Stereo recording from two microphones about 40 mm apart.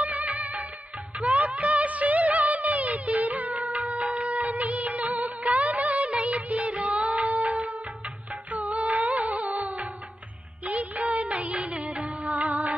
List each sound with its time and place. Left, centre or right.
0.0 s music: right
1.2 s music of bollywood: right
8.5 s music: right